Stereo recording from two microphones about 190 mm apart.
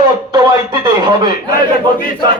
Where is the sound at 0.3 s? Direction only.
20° right (ahead or behind).